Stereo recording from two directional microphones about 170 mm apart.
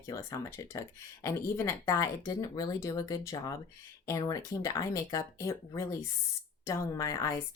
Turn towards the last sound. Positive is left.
turn(degrees=20)  # may be behind; listen again after turning